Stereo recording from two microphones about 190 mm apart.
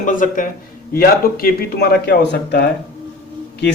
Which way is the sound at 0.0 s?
45° left (ahead or behind).